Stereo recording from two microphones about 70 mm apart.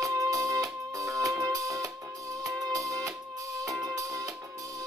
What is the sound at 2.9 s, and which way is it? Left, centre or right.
Music, right.